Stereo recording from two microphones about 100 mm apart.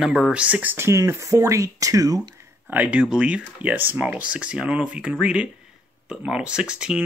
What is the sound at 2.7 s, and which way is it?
Speech, 15° right (ahead or behind).